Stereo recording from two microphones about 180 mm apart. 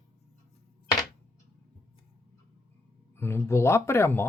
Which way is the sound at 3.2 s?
15° left (ahead or behind).